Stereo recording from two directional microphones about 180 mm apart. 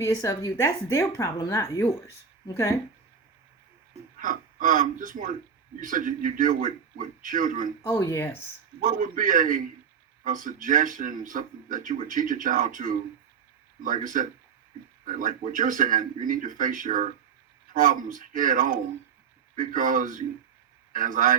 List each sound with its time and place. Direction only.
0.0 s speech: 15° left (ahead or behind)
4.2 s speech: 45° right (ahead or behind)
7.9 s speech: 15° left (ahead or behind)
8.8 s speech: 45° right (ahead or behind)